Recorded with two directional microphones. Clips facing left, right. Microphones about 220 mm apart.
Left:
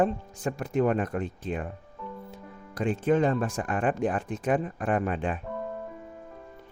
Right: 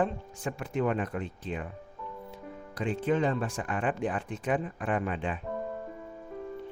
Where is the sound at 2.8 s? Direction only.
45° left (ahead or behind).